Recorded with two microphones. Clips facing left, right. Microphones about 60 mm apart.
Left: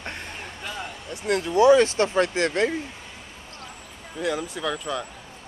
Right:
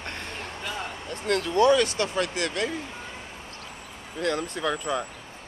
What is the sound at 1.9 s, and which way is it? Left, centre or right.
Speech, left.